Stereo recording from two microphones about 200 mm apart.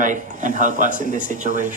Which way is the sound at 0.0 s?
40° right (ahead or behind).